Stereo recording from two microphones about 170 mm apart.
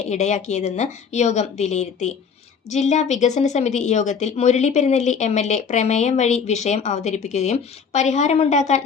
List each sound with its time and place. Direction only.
0.0 s speech: 45° left (ahead or behind)